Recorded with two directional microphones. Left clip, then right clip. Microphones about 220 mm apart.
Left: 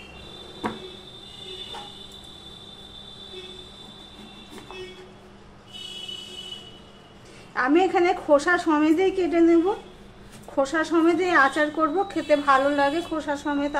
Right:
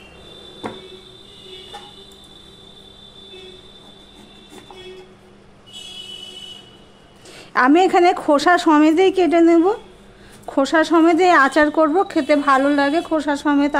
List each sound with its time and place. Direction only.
7.5 s a woman's voice: 50° right (ahead or behind)